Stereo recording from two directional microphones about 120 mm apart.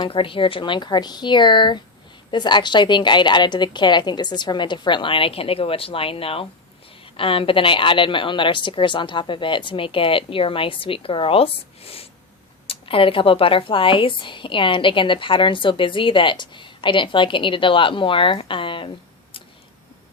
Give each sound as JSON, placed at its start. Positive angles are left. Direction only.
{"t": 0.0, "sound": "a woman's voice", "side_deg": 45}